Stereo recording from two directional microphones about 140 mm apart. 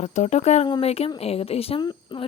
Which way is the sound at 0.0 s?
55° left (ahead or behind).